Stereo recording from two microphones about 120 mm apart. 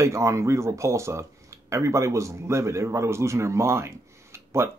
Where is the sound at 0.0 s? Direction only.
25° right (ahead or behind).